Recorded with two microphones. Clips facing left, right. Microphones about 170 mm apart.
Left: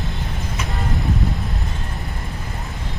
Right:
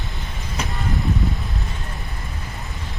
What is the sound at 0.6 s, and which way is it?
Vehicle, centre (ahead or behind).